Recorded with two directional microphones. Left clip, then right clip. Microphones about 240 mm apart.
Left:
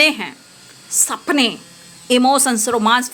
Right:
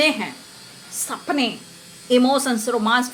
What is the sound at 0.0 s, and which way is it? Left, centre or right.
A woman's voice, left.